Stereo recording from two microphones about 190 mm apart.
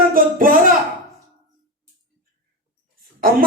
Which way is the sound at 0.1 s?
45° right (ahead or behind).